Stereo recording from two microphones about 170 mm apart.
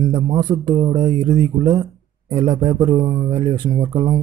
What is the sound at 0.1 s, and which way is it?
Speech, 25° right (ahead or behind).